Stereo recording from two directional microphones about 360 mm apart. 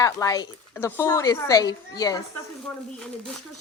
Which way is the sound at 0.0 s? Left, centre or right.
Centre.